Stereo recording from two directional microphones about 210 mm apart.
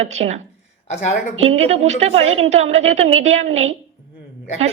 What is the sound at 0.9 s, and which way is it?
Speech, 35° left (ahead or behind).